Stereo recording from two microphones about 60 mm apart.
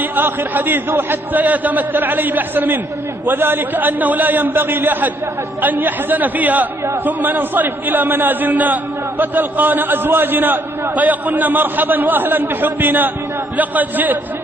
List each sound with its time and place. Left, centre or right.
0.0 s a man's voice: right